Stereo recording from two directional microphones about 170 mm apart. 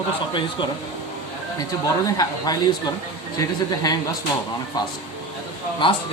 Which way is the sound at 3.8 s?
20° left (ahead or behind).